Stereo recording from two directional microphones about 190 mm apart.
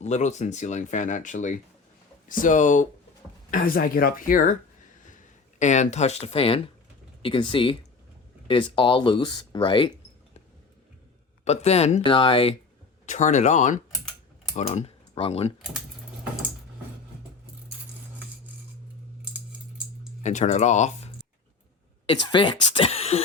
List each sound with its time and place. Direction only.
0.0 s speech: 35° left (ahead or behind)
11.4 s speech: 35° left (ahead or behind)
13.1 s speech: 40° left (ahead or behind)
20.2 s speech: 40° left (ahead or behind)
22.1 s speech: 25° left (ahead or behind)